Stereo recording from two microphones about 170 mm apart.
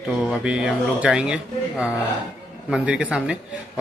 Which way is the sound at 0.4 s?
5° right (ahead or behind).